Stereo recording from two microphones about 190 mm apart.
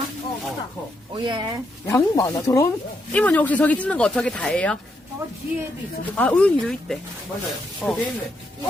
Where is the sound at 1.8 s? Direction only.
15° left (ahead or behind).